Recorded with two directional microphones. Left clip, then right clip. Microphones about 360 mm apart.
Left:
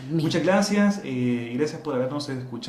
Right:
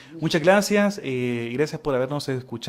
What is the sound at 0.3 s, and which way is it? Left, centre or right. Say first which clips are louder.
Speech: right 4 dB; right.